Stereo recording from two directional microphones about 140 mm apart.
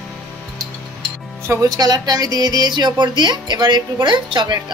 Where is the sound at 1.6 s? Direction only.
25° right (ahead or behind).